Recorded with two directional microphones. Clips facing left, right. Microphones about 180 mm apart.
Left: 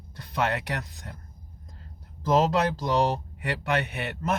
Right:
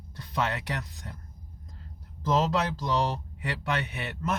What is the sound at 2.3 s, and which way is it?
Speech, 55° left (ahead or behind).